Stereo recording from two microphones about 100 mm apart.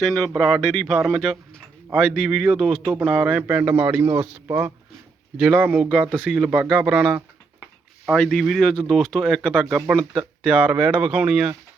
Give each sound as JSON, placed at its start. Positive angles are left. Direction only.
{"t": 0.0, "sound": "speech", "side_deg": 0}
{"t": 4.2, "sound": "speech", "side_deg": -90}
{"t": 4.4, "sound": "speech", "side_deg": -25}
{"t": 5.4, "sound": "speech", "side_deg": -10}
{"t": 8.2, "sound": "speech", "side_deg": 5}
{"t": 10.4, "sound": "speech", "side_deg": -10}